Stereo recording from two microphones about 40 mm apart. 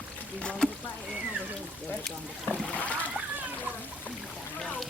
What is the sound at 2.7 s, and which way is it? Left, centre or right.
Splash, left.